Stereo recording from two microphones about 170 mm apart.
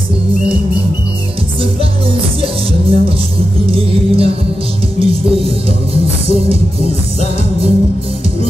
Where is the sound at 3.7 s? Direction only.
35° right (ahead or behind).